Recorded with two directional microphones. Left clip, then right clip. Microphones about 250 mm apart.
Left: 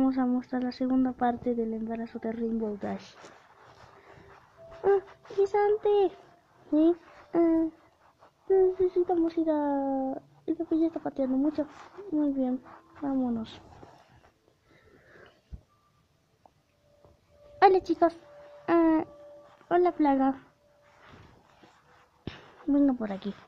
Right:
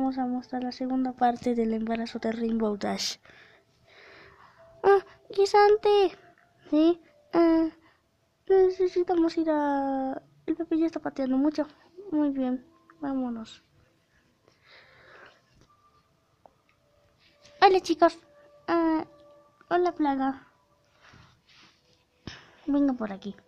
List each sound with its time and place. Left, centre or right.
0.0 s speech: centre
1.4 s speech: centre
5.5 s speech: centre
15.0 s a sound: centre
17.6 s a woman's voice: centre
22.2 s a sound: centre